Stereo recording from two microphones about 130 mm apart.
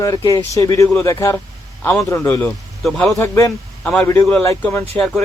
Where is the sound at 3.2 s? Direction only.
25° left (ahead or behind); by 5.2 s 10° left (ahead or behind).